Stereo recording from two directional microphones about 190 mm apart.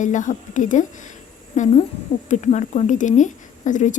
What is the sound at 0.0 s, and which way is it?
Speech, 40° left (ahead or behind).